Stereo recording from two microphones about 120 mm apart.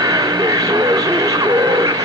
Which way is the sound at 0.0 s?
35° right (ahead or behind).